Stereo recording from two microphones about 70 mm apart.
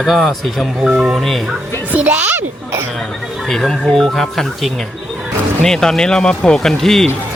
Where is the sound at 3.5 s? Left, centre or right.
Centre.